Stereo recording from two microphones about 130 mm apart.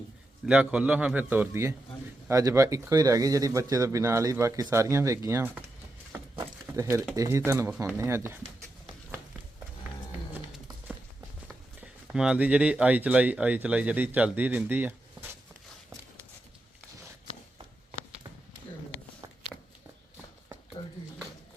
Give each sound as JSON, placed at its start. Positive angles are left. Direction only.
{"t": 0.4, "sound": "a man's voice", "side_deg": -10}
{"t": 6.4, "sound": "a sound", "side_deg": -20}
{"t": 7.2, "sound": "speech", "side_deg": -20}
{"t": 10.3, "sound": "music", "side_deg": -10}
{"t": 11.8, "sound": "speech", "side_deg": -5}